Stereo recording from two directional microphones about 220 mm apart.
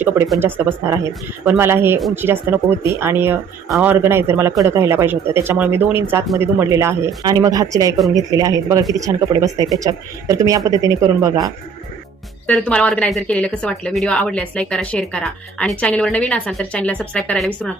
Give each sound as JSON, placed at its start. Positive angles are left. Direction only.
{"t": 0.3, "sound": "speech", "side_deg": -10}
{"t": 2.0, "sound": "a woman's voice", "side_deg": 0}
{"t": 2.2, "sound": "speech", "side_deg": -10}
{"t": 12.5, "sound": "a woman's voice", "side_deg": 5}